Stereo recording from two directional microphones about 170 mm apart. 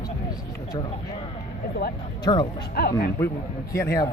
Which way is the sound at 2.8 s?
60° left (ahead or behind).